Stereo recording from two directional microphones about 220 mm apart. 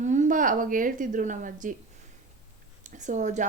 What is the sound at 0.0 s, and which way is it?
A woman's voice, 35° right (ahead or behind).